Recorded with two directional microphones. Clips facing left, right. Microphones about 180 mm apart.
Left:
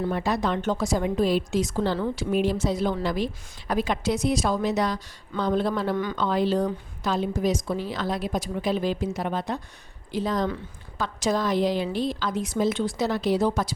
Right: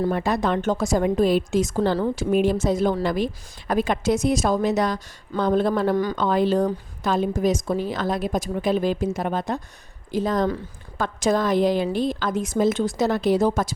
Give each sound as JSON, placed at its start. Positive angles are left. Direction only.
{"t": 0.0, "sound": "a woman's voice", "side_deg": -50}